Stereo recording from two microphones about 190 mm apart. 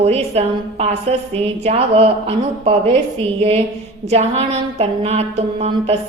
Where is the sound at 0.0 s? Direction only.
35° right (ahead or behind).